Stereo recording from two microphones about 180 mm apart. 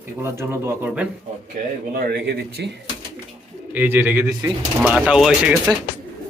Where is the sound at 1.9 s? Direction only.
60° right (ahead or behind).